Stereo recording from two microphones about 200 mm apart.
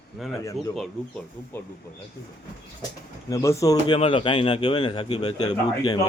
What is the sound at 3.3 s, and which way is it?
A man's voice, 15° left (ahead or behind).